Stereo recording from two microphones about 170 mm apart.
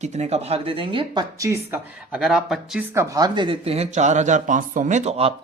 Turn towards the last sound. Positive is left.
turn(degrees=-40)  # may be behind; listen again after turning